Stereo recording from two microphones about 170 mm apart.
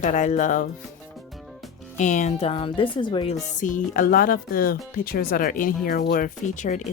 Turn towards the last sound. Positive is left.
turn(degrees=45)  # may be behind; listen again after turning